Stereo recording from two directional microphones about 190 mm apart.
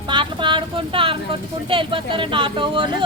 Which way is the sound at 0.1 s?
25° right (ahead or behind).